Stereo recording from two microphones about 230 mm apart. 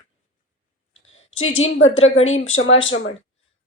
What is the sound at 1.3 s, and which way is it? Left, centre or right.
A woman's voice, left.